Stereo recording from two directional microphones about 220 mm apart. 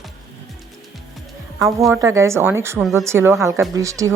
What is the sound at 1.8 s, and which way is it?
Speech, 10° right (ahead or behind).